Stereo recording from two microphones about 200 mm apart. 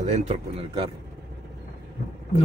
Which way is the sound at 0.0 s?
35° right (ahead or behind).